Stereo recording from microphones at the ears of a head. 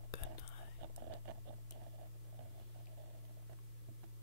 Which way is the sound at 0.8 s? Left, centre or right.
Right.